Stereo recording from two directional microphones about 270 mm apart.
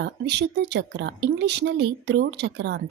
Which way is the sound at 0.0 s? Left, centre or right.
Right.